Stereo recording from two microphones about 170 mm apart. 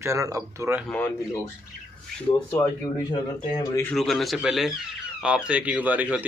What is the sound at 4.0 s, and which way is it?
A man's voice, centre (ahead or behind).